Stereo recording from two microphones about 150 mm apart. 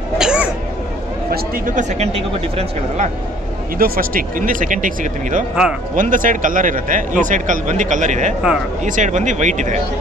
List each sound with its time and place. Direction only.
0.2 s a sound: 5° right (ahead or behind)
1.8 s speech: 50° right (ahead or behind)
3.7 s a man's voice: 75° right (ahead or behind); by 9.8 s 55° right (ahead or behind)